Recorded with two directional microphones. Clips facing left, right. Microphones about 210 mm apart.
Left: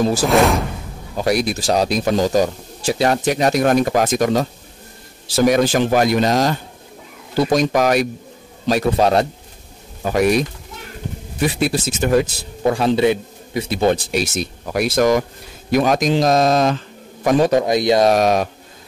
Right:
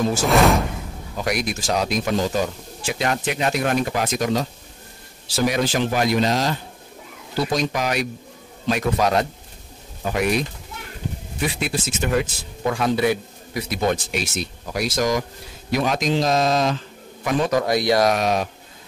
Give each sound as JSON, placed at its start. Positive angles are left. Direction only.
{"t": 1.1, "sound": "a man's voice", "side_deg": 35}
{"t": 8.6, "sound": "a man's voice", "side_deg": 35}
{"t": 11.6, "sound": "a man's voice", "side_deg": 40}
{"t": 15.7, "sound": "a man's voice", "side_deg": 45}
{"t": 17.5, "sound": "speech", "side_deg": 20}
{"t": 18.1, "sound": "speech", "side_deg": 45}